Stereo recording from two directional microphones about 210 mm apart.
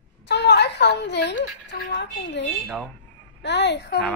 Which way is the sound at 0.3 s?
55° left (ahead or behind).